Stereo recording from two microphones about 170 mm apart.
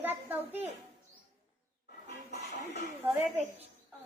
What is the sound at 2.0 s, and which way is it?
Music, 75° left (ahead or behind).